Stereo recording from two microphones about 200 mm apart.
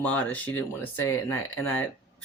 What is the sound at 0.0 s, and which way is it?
Speech, 10° left (ahead or behind).